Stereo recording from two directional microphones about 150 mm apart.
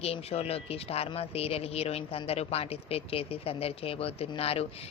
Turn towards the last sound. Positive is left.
turn(degrees=40)  # may be behind; listen again after turning